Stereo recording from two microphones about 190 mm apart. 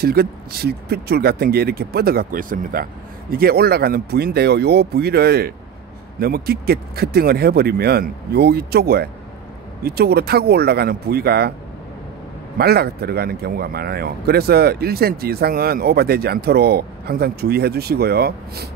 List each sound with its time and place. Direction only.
0.0 s speech: 55° right (ahead or behind)
12.5 s speech: 55° right (ahead or behind)